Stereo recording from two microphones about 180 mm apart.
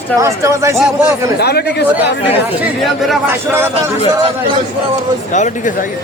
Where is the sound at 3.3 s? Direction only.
10° right (ahead or behind).